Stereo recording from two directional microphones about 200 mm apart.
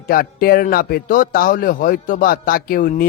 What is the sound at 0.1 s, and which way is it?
Speech, 45° left (ahead or behind).